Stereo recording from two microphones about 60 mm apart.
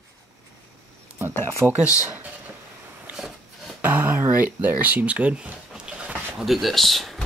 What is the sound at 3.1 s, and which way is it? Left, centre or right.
Wood, centre.